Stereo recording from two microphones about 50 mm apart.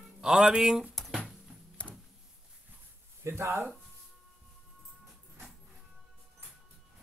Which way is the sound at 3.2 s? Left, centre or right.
Right.